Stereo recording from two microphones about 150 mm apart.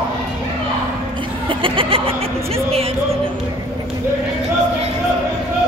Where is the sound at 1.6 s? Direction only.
35° right (ahead or behind).